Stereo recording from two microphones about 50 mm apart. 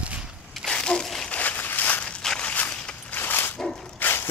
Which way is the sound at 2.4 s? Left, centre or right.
Left.